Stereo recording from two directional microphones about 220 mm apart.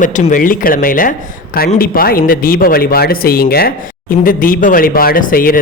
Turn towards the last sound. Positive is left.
turn(degrees=40)  # may be behind; listen again after turning